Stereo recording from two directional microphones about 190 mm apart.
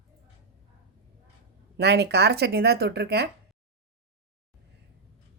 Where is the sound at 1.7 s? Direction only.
60° right (ahead or behind).